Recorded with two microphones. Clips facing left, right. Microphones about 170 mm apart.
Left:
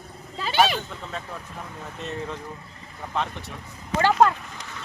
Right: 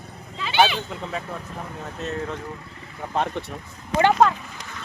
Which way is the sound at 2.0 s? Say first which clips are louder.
Right 3 dB; centre (ahead or behind).